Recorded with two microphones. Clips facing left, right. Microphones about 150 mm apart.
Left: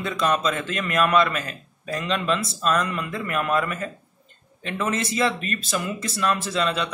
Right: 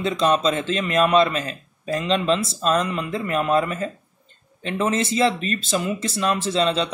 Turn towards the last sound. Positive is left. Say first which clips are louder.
# right 4 dB
turn(degrees=-30)  # may be behind; listen again after turning